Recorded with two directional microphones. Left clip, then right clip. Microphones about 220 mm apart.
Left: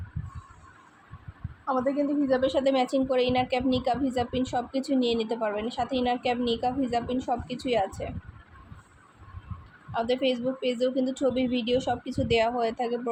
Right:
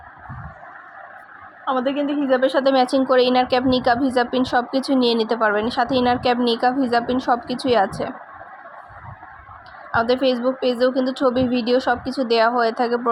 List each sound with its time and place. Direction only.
2.2 s a woman's voice: 20° right (ahead or behind)
9.9 s a woman's voice: 20° right (ahead or behind)